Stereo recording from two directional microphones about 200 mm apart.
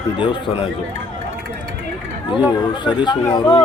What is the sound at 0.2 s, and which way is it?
Speech, 25° left (ahead or behind).